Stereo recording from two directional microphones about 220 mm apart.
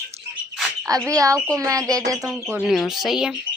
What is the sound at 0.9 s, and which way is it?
A woman's voice, 15° right (ahead or behind).